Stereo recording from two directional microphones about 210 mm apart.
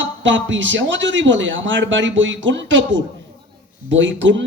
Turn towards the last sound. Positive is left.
turn(degrees=-60)  # may be behind; listen again after turning